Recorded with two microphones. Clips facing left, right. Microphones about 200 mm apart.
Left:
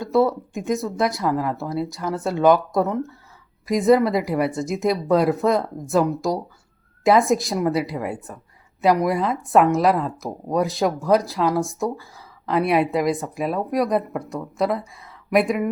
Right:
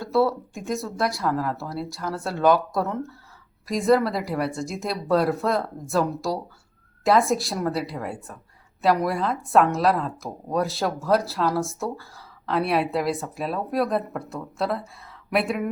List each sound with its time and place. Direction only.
0.0 s speech: 20° left (ahead or behind)
12.1 s a sound: centre (ahead or behind)
12.7 s a woman's voice: centre (ahead or behind)
13.2 s speech: 15° left (ahead or behind)